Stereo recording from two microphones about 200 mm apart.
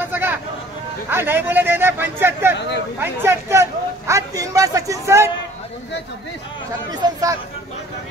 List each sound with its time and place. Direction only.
0.0 s vehicle: 10° right (ahead or behind)
1.1 s a man's voice: 10° right (ahead or behind)
6.9 s speech: 20° right (ahead or behind)